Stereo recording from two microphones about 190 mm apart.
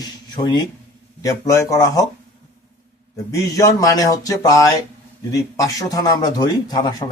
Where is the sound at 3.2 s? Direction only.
15° left (ahead or behind).